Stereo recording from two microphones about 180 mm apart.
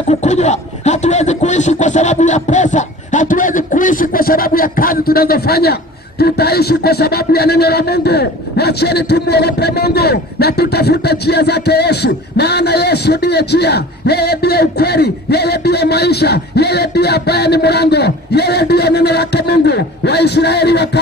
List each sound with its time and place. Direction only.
0.1 s speech: 40° left (ahead or behind); by 21.0 s 65° left (ahead or behind)